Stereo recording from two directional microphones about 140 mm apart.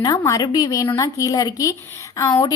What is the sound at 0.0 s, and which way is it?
A woman's voice, 25° left (ahead or behind).